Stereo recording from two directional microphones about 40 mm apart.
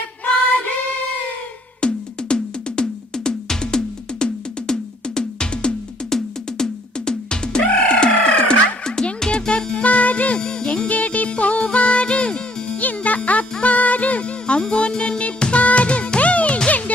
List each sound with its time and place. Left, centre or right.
1.8 s music: left
6.0 s music: centre
9.8 s music: left
10.4 s music: left
10.9 s music: left
12.8 s music: left
14.6 s music: left